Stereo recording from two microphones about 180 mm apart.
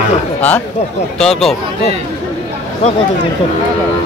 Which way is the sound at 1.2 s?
Centre (ahead or behind).